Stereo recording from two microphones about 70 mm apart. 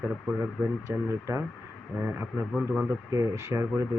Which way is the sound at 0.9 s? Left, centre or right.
Right.